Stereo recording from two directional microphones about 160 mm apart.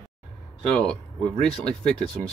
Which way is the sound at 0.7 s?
5° left (ahead or behind).